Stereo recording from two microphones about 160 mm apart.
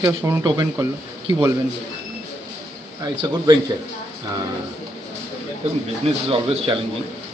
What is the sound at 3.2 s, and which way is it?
Speech, 25° right (ahead or behind).